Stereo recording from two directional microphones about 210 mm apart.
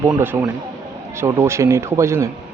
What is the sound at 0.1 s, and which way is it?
Speech, 10° right (ahead or behind).